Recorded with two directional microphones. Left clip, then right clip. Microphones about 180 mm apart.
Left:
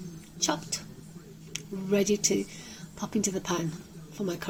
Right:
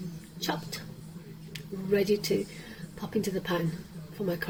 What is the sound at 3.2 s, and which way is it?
Speech, 45° left (ahead or behind).